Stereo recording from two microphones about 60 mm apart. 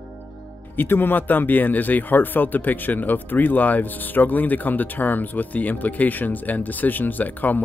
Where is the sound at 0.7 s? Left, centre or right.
Left.